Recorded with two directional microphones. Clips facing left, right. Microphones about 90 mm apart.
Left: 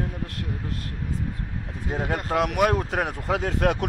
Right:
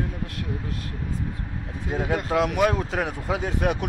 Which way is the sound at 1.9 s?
45° left (ahead or behind).